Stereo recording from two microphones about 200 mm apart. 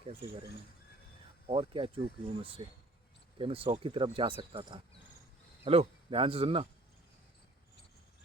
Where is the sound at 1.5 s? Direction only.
25° right (ahead or behind).